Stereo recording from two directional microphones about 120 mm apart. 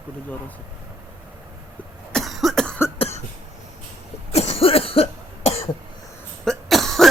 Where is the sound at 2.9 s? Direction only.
55° left (ahead or behind).